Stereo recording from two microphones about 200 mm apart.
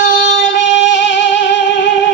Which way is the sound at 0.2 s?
65° left (ahead or behind).